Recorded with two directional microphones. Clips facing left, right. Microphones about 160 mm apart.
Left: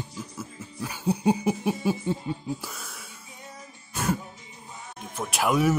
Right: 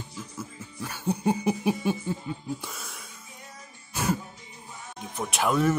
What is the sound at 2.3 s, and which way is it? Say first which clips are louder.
Speech: left 3 dB; 30° left (ahead or behind).